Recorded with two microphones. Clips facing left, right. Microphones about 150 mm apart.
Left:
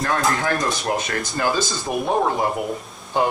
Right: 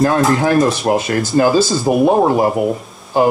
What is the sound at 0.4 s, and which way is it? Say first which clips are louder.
Speech: right 9 dB; 25° right (ahead or behind).